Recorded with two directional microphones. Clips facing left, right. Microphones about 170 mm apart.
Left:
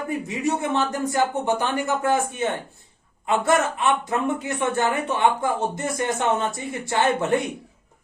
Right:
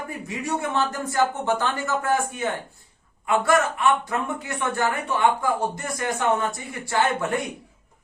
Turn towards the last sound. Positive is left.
turn(degrees=25)  # may be behind; listen again after turning